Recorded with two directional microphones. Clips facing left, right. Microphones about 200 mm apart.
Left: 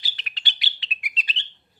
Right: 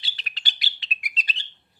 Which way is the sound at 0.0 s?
35° right (ahead or behind).